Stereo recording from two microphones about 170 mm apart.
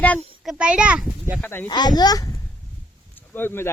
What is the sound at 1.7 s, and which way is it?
Speech, 25° left (ahead or behind).